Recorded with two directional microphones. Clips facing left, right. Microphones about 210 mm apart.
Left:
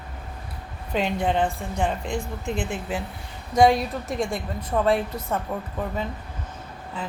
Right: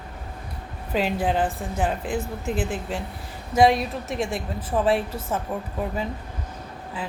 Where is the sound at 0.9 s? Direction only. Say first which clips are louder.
Even; 5° right (ahead or behind).